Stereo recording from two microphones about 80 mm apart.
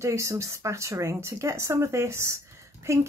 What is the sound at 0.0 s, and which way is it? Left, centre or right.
Speech, right.